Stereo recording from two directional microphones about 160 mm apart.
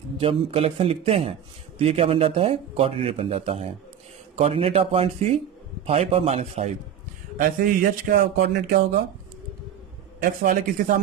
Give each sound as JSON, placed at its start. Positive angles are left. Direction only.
{"t": 0.2, "sound": "speech", "side_deg": -35}
{"t": 7.3, "sound": "a man's voice", "side_deg": -65}
{"t": 10.2, "sound": "a man's voice", "side_deg": -60}